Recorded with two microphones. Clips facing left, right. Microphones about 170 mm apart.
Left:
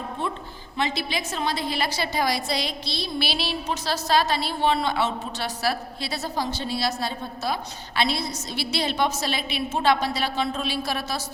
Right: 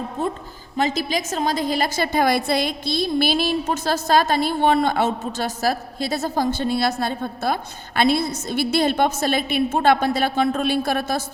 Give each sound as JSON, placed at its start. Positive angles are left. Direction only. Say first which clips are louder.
{"t": 0.8, "sound": "a woman's voice", "louder": "right 5 dB", "side_deg": -40}